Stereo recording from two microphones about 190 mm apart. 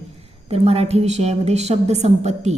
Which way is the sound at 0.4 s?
35° right (ahead or behind).